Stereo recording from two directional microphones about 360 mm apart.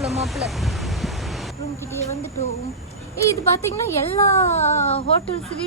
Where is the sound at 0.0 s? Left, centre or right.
Centre.